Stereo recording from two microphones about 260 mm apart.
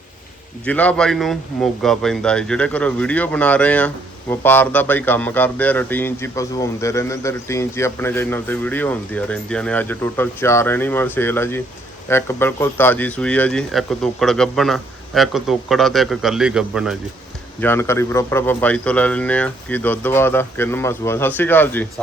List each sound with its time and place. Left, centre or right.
0.6 s speech: centre
17.6 s speech: centre